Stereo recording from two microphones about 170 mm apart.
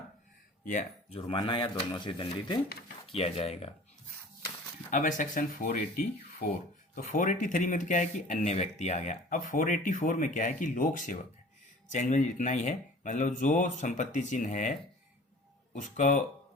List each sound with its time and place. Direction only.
0.6 s speech: 50° left (ahead or behind)
1.1 s speech: 30° left (ahead or behind)
4.9 s speech: 50° left (ahead or behind)